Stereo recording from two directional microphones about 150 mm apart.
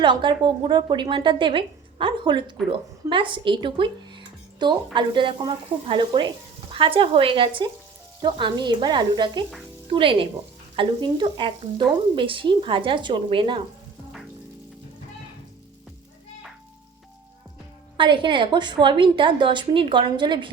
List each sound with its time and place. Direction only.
0.0 s speech: 30° right (ahead or behind)
17.9 s speech: 35° right (ahead or behind)